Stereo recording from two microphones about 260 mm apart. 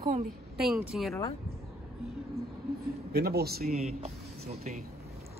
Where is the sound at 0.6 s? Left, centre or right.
Centre.